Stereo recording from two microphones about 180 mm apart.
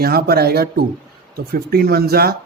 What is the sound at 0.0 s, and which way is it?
Speech, 60° right (ahead or behind).